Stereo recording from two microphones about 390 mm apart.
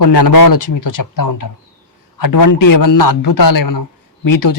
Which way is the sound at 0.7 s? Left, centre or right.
Left.